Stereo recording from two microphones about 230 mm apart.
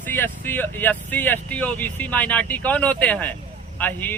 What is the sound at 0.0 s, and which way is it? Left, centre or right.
Speech, centre.